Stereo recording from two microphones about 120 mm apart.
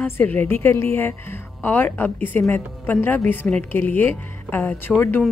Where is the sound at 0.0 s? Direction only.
15° left (ahead or behind).